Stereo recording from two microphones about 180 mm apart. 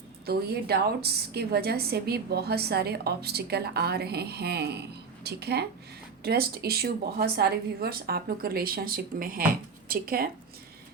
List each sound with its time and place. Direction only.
0.3 s a woman's voice: 60° right (ahead or behind)